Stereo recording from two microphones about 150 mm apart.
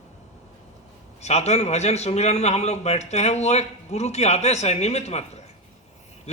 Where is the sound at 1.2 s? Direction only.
45° left (ahead or behind).